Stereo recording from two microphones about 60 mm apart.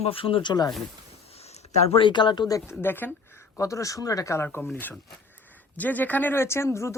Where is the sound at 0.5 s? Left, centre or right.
Left.